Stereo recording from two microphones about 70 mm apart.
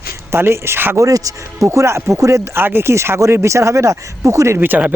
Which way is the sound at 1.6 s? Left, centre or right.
Right.